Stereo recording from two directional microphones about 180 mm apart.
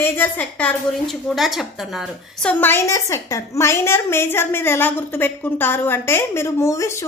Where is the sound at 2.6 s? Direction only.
15° left (ahead or behind).